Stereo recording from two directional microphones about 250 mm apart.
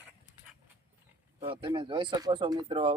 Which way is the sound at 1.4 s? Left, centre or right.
Centre.